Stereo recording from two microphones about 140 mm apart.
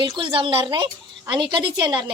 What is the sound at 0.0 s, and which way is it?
A woman's voice, 35° right (ahead or behind).